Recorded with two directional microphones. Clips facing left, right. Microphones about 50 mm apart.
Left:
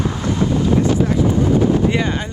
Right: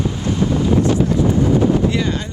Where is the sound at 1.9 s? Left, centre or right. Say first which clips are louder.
Left 1 dB; left.